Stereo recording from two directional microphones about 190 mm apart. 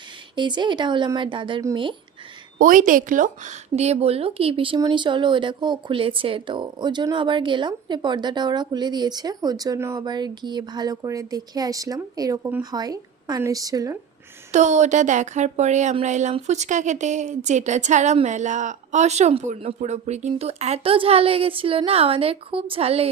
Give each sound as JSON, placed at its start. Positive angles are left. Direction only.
{"t": 0.3, "sound": "speech", "side_deg": -25}
{"t": 2.6, "sound": "speech", "side_deg": -45}
{"t": 14.5, "sound": "speech", "side_deg": -40}